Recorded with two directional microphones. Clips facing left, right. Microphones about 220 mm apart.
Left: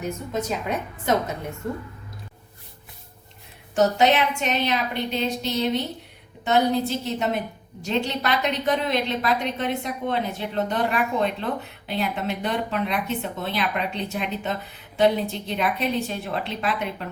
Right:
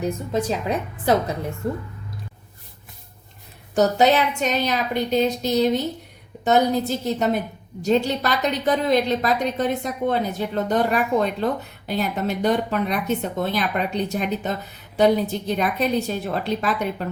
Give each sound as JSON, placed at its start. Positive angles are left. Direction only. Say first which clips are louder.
{"t": 0.0, "sound": "a woman's voice", "louder": "right 4 dB", "side_deg": -30}
{"t": 3.8, "sound": "a woman's voice", "louder": "right 2 dB", "side_deg": -40}